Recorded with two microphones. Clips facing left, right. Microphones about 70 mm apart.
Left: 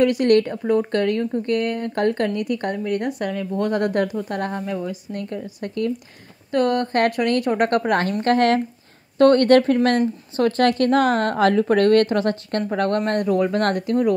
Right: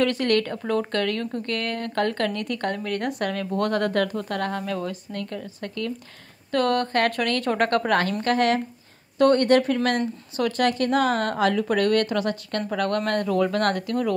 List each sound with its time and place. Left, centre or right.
0.0 s speech: centre
3.1 s speech: centre
3.7 s speech: left
8.2 s a woman's voice: left
9.2 s speech: left
9.8 s a woman's voice: left